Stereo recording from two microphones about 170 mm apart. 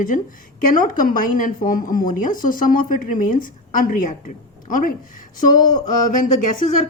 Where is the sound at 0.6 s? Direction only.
55° left (ahead or behind).